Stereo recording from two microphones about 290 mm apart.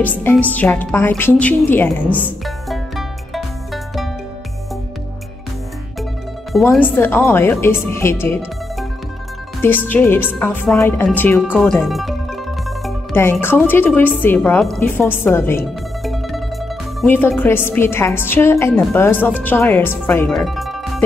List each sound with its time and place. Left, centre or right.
0.0 s a woman's voice: centre
2.1 s music: centre
6.6 s a woman's voice: centre
9.6 s a woman's voice: centre